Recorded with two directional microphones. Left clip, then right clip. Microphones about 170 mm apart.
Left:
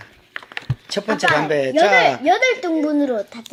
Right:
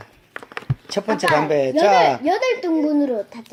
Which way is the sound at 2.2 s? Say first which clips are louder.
Left 3 dB; 35° left (ahead or behind).